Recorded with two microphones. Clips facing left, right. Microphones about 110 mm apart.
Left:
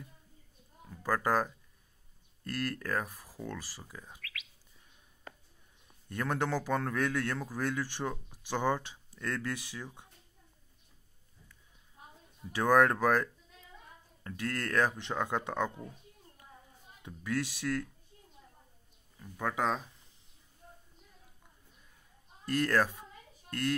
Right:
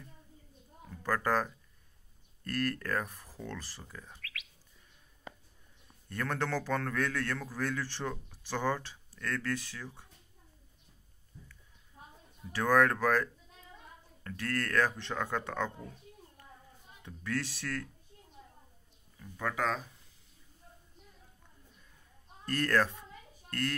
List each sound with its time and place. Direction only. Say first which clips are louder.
0.8 s a man's voice: left 1 dB; 10° left (ahead or behind)
6.0 s a man's voice: left 2 dB; 15° left (ahead or behind)
12.5 s a man's voice: left 1 dB; 15° left (ahead or behind)
17.0 s a man's voice: left 2 dB; 15° left (ahead or behind)
19.1 s a man's voice: left 1 dB; 15° left (ahead or behind)
22.5 s a man's voice: left 1 dB; 10° left (ahead or behind)